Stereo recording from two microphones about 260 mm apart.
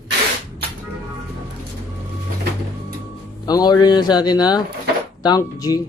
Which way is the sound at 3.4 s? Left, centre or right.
Centre.